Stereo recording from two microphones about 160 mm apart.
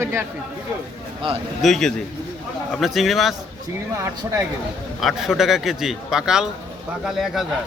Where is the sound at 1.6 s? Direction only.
Centre (ahead or behind).